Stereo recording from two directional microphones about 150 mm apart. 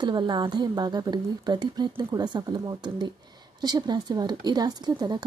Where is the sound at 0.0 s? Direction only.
30° right (ahead or behind).